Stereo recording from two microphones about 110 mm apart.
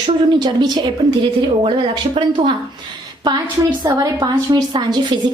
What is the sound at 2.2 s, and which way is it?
Speech, 55° right (ahead or behind).